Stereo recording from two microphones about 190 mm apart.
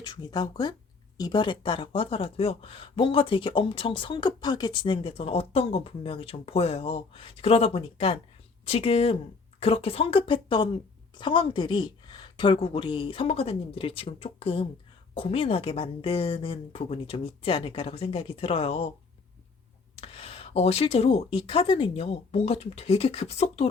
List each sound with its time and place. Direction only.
0.0 s speech: 25° left (ahead or behind)
20.0 s speech: 30° left (ahead or behind)